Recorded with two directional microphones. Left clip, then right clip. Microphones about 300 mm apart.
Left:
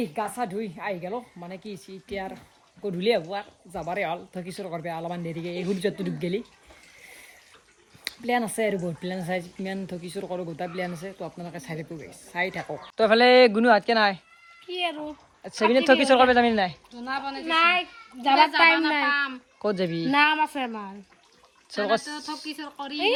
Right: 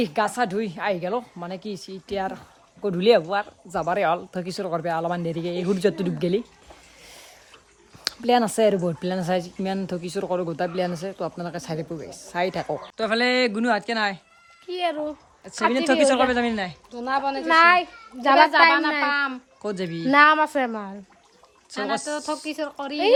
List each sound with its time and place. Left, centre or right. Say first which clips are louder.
0.0 s speech: right 6 dB; centre
8.0 s speech: right 6 dB; centre
13.0 s speech: left 6 dB; centre
16.9 s speech: right 7 dB; centre
19.6 s speech: left 1 dB; centre
22.0 s speech: right 6 dB; centre